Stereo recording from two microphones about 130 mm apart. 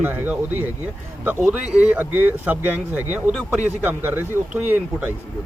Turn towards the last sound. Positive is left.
turn(degrees=-15)  # may be behind; listen again after turning